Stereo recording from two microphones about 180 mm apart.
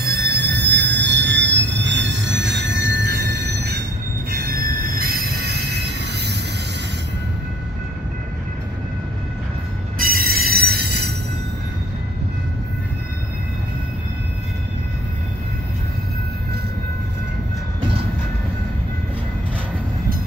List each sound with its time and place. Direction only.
0.0 s train wheels squealing: 60° right (ahead or behind)
4.3 s train: 55° right (ahead or behind)
9.9 s train wheels squealing: 50° right (ahead or behind)